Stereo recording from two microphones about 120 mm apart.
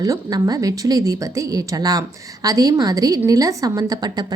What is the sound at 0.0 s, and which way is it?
A woman's voice, 30° right (ahead or behind).